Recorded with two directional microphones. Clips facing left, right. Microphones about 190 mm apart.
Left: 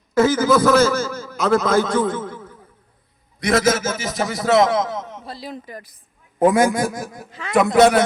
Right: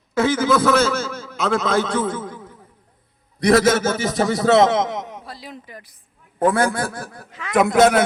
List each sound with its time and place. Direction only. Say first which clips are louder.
0.2 s a man's voice: left 2 dB; 5° left (ahead or behind); by 2.6 s 15° right (ahead or behind)
3.4 s a man's voice: right 3 dB; 35° right (ahead or behind); by 5.2 s 15° right (ahead or behind)
5.2 s speech: left 4 dB; 30° left (ahead or behind)
6.4 s a man's voice: left 3 dB; 15° left (ahead or behind)
7.3 s speech: left 1 dB; 35° left (ahead or behind)
7.5 s a man's voice: left 1 dB; centre (ahead or behind)